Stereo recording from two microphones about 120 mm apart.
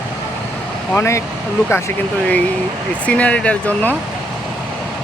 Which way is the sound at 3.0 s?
10° left (ahead or behind).